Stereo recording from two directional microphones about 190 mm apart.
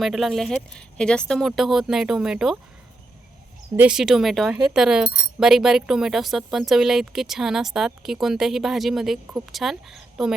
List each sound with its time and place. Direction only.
0.0 s speech: centre (ahead or behind)
3.8 s speech: 5° right (ahead or behind)